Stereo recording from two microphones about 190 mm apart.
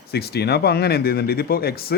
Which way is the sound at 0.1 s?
55° left (ahead or behind).